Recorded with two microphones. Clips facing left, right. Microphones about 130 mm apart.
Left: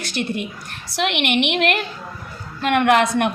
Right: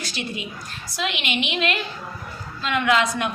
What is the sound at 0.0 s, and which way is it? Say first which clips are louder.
A woman's voice: left 6 dB; 60° left (ahead or behind).